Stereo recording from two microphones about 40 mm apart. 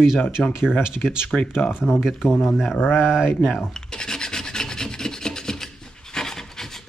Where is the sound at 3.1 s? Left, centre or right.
Centre.